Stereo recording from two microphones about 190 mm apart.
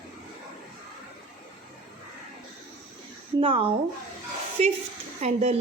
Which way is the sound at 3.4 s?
30° right (ahead or behind).